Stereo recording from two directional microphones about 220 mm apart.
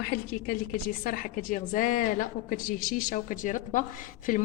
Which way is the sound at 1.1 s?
35° left (ahead or behind).